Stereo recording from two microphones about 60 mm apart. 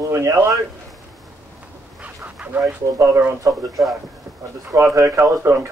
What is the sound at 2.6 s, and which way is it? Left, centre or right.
Speech, right.